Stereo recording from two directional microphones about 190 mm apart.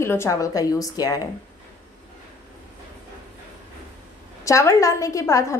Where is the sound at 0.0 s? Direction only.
15° left (ahead or behind).